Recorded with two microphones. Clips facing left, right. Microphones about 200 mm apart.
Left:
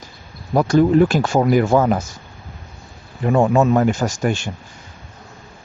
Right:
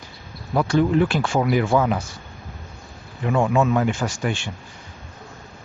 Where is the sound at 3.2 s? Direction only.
40° left (ahead or behind).